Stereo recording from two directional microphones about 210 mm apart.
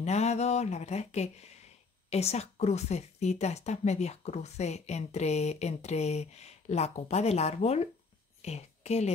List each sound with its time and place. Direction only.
0.0 s a woman's voice: 30° left (ahead or behind)